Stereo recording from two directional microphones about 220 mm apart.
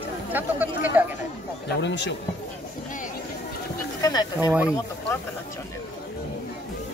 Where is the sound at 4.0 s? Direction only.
15° left (ahead or behind).